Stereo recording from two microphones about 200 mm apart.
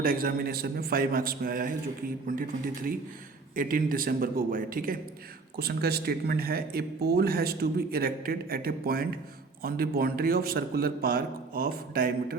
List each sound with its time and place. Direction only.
0.0 s speech: 45° right (ahead or behind)
3.5 s speech: 45° right (ahead or behind)